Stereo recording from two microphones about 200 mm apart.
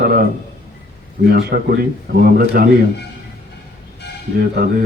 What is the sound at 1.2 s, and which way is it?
Speech, 50° right (ahead or behind).